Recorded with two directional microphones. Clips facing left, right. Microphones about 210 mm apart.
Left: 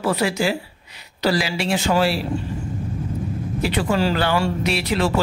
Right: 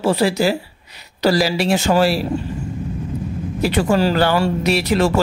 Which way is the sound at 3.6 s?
45° right (ahead or behind).